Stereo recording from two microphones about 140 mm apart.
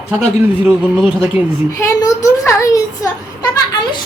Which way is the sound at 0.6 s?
5° right (ahead or behind).